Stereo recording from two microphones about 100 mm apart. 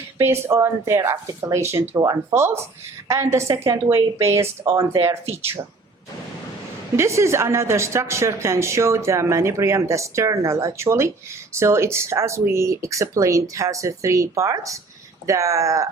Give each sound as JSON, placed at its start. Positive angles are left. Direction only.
{"t": 0.2, "sound": "a woman's voice", "side_deg": -25}
{"t": 6.9, "sound": "a woman's voice", "side_deg": -30}